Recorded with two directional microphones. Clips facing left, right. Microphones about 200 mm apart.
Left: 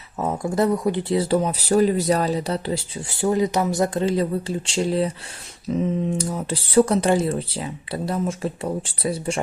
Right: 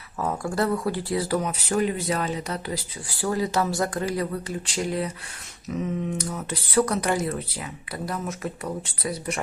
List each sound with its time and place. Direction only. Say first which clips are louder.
0.2 s speech: left 4 dB; 20° left (ahead or behind)